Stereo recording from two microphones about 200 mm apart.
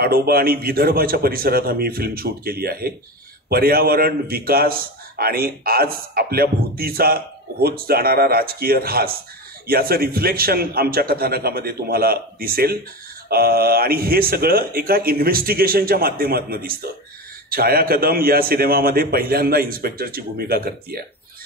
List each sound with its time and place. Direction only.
0.0 s a man's voice: 50° right (ahead or behind)